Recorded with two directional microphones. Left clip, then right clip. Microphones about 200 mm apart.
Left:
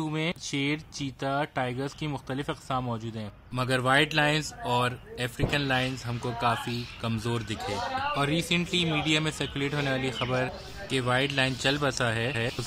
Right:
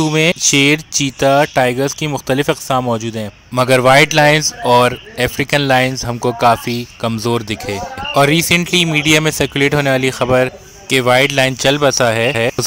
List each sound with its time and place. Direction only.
0.0 s speech: 45° right (ahead or behind)